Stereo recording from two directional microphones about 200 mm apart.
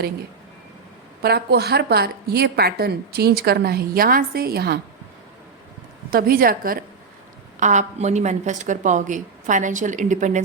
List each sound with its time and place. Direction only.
1.2 s a woman's voice: 55° right (ahead or behind)
6.1 s a woman's voice: 45° right (ahead or behind)